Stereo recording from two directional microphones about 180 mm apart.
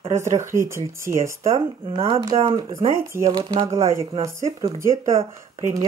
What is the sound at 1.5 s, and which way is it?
Speech, 30° right (ahead or behind).